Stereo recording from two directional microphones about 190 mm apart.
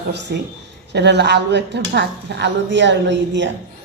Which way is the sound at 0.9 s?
65° right (ahead or behind).